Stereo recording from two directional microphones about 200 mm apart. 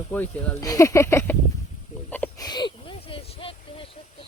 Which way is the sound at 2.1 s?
10° left (ahead or behind).